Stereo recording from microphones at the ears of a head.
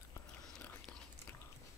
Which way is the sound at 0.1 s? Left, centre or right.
Left.